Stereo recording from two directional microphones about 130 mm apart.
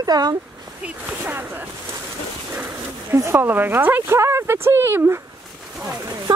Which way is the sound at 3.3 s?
15° right (ahead or behind).